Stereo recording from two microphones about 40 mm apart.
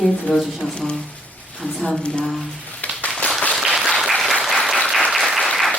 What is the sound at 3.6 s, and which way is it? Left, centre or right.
Applause, centre.